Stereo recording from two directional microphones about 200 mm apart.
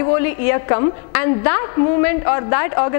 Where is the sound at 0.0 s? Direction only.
15° left (ahead or behind).